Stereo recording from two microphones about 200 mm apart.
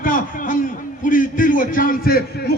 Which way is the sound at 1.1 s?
40° left (ahead or behind).